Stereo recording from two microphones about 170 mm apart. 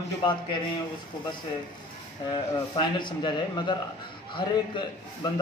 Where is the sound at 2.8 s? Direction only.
25° left (ahead or behind).